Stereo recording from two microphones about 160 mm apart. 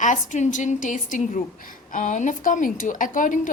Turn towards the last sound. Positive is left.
turn(degrees=55)  # may be behind; listen again after turning